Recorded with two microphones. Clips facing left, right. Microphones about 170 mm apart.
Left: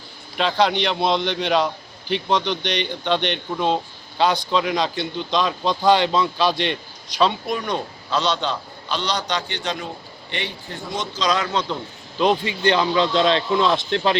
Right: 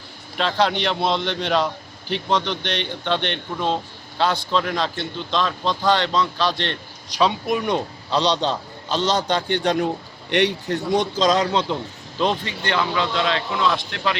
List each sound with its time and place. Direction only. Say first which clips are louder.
0.3 s a man's voice: left 1 dB; centre (ahead or behind)
7.4 s speech: right 3 dB; 15° right (ahead or behind)
8.1 s a man's voice: right 2 dB; 35° right (ahead or behind); by 9.9 s 60° right (ahead or behind)
10.3 s a man's voice: right 11 dB; 75° right (ahead or behind)
10.9 s a man's voice: right 6 dB; 60° right (ahead or behind)
12.2 s speech: left 4 dB; 10° left (ahead or behind); by 14.2 s 30° left (ahead or behind)